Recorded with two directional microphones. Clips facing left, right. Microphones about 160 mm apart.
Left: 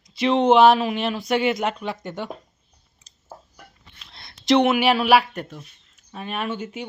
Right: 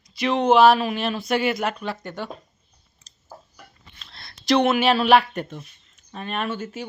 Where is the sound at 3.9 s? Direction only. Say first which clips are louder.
Right 1 dB; 20° left (ahead or behind).